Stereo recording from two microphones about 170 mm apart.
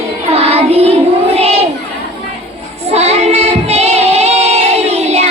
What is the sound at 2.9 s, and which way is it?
Child singing, 40° right (ahead or behind).